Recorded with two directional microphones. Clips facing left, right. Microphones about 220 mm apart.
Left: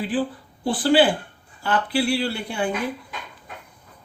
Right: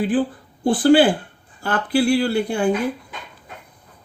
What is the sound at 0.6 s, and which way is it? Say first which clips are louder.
Speech: right 4 dB; 50° right (ahead or behind).